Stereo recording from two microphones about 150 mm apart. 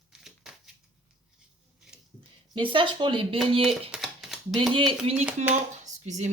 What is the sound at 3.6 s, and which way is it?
Typewriter, centre (ahead or behind).